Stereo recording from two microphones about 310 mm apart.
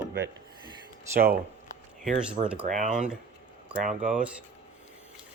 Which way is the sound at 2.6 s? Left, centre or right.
Right.